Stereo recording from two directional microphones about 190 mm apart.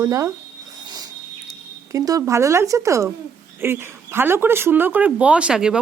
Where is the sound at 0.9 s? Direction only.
20° right (ahead or behind).